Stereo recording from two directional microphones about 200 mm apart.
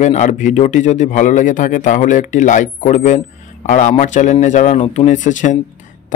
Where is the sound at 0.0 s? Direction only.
35° left (ahead or behind).